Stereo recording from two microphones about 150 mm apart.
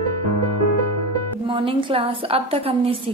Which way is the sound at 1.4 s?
35° right (ahead or behind).